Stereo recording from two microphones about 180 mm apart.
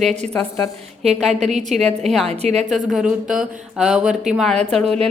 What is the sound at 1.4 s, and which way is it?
Speech, 40° right (ahead or behind).